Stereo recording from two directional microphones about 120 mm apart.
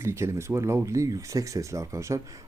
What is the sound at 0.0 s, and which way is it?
Speech, 20° right (ahead or behind).